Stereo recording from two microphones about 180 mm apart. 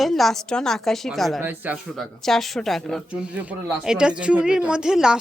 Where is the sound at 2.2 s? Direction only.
Centre (ahead or behind).